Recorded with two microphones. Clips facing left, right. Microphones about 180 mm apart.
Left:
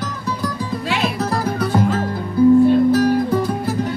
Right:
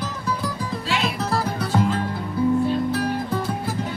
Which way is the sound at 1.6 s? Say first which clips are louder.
Left 5 dB; 75° left (ahead or behind).